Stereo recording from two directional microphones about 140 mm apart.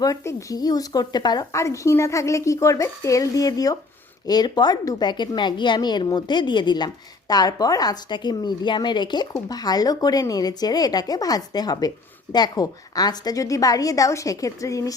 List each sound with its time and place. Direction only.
0.0 s a woman's voice: 20° left (ahead or behind)